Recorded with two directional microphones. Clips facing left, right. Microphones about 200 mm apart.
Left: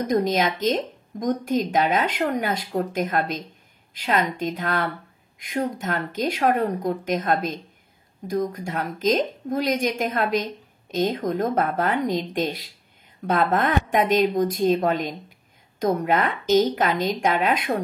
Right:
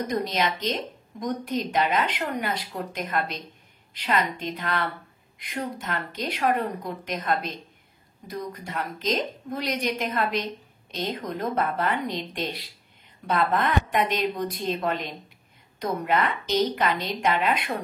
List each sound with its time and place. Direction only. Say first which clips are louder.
0.1 s a woman's voice: left 8 dB; 45° left (ahead or behind)